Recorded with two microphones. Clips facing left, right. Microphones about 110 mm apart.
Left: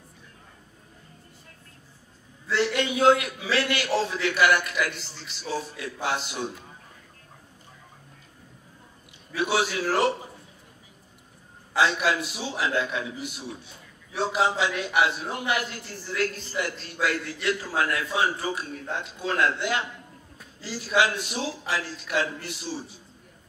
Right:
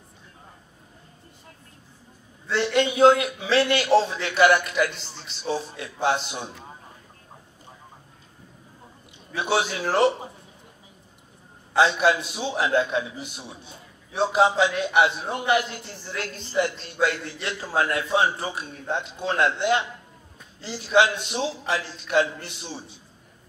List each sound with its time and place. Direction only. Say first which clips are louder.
2.4 s a man's voice: right 3 dB; 25° right (ahead or behind)
9.3 s a man's voice: right 1 dB; 25° right (ahead or behind)
11.7 s a man's voice: right 4 dB; 25° right (ahead or behind)